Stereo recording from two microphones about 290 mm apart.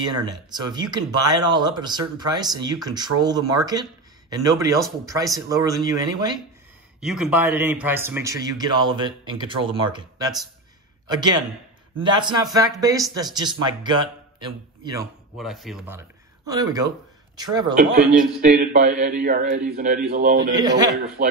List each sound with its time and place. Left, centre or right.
0.0 s speech: centre
7.0 s a man's voice: centre
15.3 s speech: centre
17.7 s a man's voice: right
20.5 s speech: centre